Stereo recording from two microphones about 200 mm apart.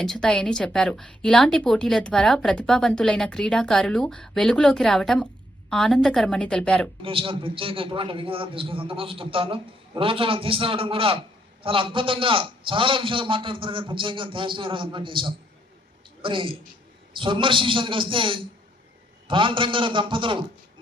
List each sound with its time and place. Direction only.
0.0 s a woman's voice: 5° left (ahead or behind)
7.0 s a man's voice: 25° right (ahead or behind)